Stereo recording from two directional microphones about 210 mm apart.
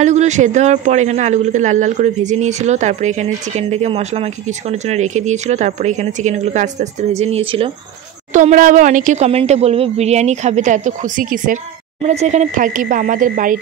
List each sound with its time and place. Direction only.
0.0 s a man's voice: 35° right (ahead or behind)